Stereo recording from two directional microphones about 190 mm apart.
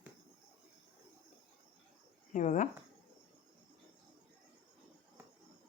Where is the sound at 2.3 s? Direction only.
40° left (ahead or behind).